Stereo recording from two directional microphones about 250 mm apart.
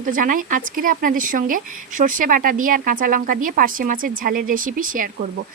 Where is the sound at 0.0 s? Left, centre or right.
Right.